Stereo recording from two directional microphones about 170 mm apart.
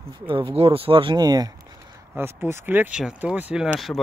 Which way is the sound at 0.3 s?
35° right (ahead or behind).